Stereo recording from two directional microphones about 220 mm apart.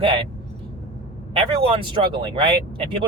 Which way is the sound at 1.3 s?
25° right (ahead or behind).